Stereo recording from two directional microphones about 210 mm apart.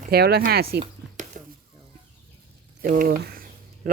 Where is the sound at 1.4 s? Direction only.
40° right (ahead or behind).